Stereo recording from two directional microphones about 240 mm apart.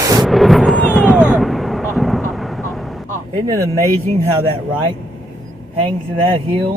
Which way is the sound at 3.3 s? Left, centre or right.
Centre.